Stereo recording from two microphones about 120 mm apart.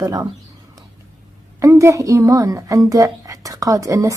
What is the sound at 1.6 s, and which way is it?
A child's voice, 25° right (ahead or behind).